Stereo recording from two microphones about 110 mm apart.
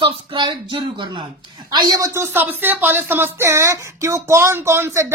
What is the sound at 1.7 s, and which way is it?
A woman's voice, 35° right (ahead or behind).